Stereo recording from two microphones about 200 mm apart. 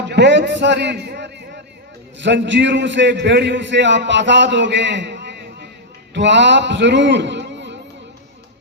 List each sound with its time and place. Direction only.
0.1 s a man's voice: 60° right (ahead or behind)